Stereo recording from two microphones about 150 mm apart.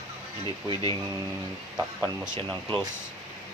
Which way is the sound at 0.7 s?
25° left (ahead or behind).